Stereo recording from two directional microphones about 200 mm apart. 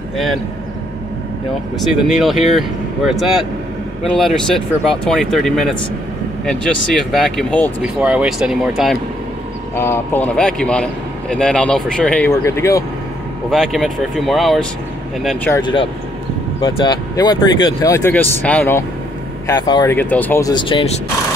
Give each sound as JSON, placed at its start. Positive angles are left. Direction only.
{"t": 1.8, "sound": "speech", "side_deg": 0}
{"t": 8.0, "sound": "speech", "side_deg": -5}
{"t": 9.8, "sound": "speech", "side_deg": 10}
{"t": 13.5, "sound": "speech", "side_deg": 0}
{"t": 15.6, "sound": "speech", "side_deg": 25}
{"t": 19.4, "sound": "speech", "side_deg": 20}
{"t": 20.0, "sound": "speech", "side_deg": 10}